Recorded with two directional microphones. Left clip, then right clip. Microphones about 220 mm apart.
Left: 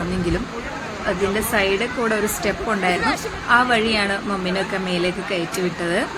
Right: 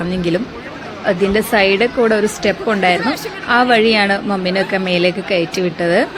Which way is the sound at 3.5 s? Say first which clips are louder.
Right 5 dB; 10° right (ahead or behind).